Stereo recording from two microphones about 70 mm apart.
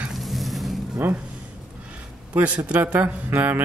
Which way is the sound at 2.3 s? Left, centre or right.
Centre.